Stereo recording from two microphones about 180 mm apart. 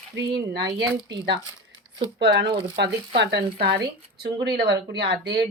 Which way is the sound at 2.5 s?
30° right (ahead or behind).